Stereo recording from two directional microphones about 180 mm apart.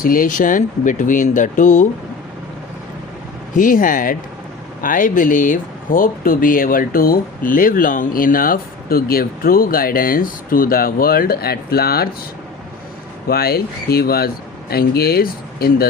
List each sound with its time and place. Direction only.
0.0 s speech: 50° left (ahead or behind)
3.5 s speech: 50° left (ahead or behind)
13.2 s speech: 60° left (ahead or behind)